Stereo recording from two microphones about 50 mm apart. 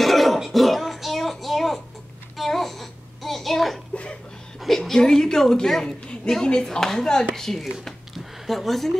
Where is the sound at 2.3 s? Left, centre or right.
Centre.